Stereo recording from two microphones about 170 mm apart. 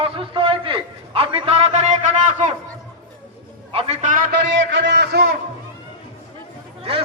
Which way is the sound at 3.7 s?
40° right (ahead or behind).